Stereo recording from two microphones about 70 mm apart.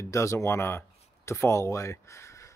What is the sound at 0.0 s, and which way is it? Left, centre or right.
Speech, left.